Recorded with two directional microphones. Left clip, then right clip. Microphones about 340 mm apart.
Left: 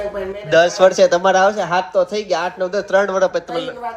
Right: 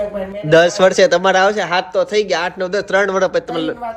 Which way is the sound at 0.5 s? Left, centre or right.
Right.